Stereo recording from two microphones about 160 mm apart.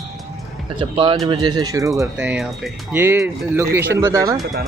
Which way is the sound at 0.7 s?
35° right (ahead or behind).